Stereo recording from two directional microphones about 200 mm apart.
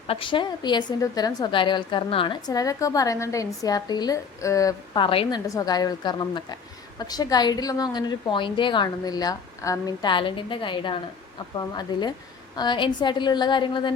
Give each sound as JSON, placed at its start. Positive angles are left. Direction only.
{"t": 0.1, "sound": "a woman's voice", "side_deg": 25}